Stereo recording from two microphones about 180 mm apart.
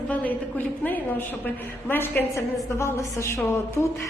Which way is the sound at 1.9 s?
10° left (ahead or behind).